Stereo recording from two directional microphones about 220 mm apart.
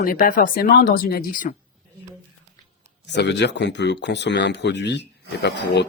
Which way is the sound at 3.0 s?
50° left (ahead or behind).